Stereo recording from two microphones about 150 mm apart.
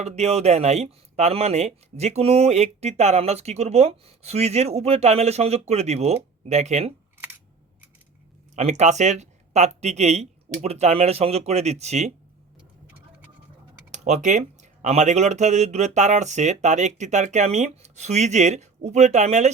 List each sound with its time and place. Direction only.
0.0 s speech: 45° right (ahead or behind)
8.5 s speech: 50° right (ahead or behind)
13.9 s speech: 50° right (ahead or behind)